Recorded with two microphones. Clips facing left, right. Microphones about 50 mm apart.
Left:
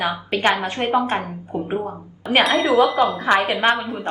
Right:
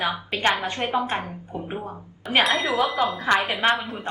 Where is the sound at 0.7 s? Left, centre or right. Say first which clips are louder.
Left 5 dB; left.